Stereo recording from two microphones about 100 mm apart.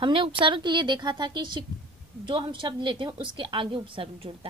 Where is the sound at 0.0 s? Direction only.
55° right (ahead or behind).